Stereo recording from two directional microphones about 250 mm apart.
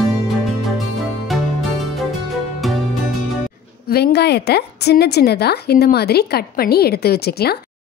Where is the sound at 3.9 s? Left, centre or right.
Left.